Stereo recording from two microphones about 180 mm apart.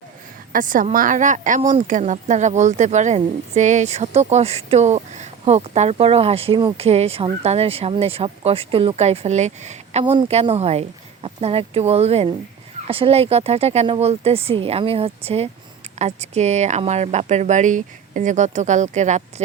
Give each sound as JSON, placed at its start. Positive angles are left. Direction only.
{"t": 0.5, "sound": "a woman's voice", "side_deg": -50}